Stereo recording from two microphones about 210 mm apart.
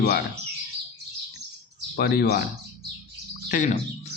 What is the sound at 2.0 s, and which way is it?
Speech, 50° left (ahead or behind).